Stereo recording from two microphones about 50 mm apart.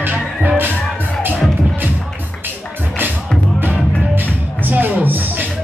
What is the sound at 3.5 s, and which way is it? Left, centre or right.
Music, right.